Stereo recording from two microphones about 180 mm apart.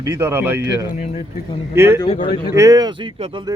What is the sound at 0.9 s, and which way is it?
Speech, 50° left (ahead or behind).